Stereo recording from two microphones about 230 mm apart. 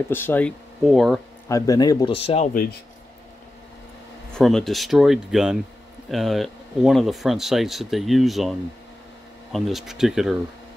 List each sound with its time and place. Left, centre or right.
0.1 s speech: centre
1.5 s a man's voice: centre
4.3 s speech: centre